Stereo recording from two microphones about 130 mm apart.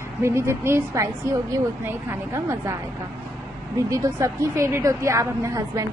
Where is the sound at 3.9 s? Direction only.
25° right (ahead or behind).